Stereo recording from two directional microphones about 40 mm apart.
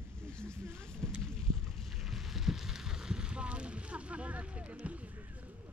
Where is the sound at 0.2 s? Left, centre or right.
Left.